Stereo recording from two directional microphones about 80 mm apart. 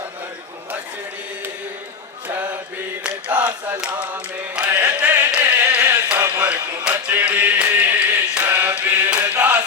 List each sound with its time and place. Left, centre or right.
3.0 s a sound: centre
4.5 s chant: centre
6.2 s music: centre
7.2 s mantra: right